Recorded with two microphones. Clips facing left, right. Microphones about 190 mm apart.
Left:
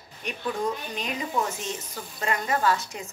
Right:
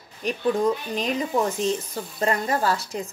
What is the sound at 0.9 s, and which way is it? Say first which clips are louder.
A woman's voice: right 5 dB; 35° right (ahead or behind).